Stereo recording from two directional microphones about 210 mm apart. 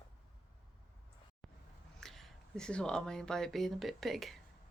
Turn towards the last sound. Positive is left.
turn(degrees=0)  # may be behind; listen again after turning